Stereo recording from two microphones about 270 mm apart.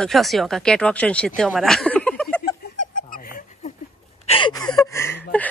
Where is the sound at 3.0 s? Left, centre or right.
Left.